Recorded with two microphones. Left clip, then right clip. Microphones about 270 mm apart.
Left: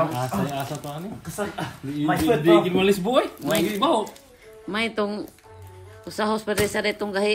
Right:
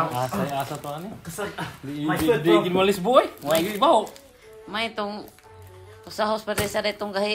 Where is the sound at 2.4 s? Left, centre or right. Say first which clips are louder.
Left 3 dB; centre.